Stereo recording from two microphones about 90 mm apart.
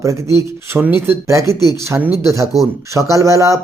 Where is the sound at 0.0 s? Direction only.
35° right (ahead or behind).